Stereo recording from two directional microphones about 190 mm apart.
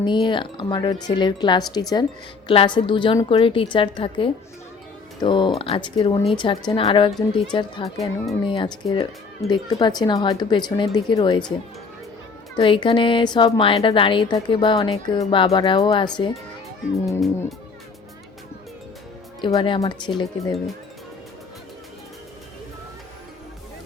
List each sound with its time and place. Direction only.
0.0 s speech: 25° left (ahead or behind)
12.5 s speech: 25° left (ahead or behind)
17.1 s speech: centre (ahead or behind)
19.4 s speech: 25° left (ahead or behind)